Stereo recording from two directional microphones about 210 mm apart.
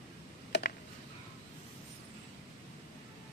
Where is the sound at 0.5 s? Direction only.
50° left (ahead or behind).